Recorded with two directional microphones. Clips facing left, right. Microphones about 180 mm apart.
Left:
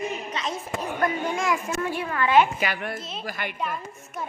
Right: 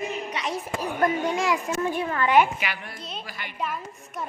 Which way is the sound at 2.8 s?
55° left (ahead or behind).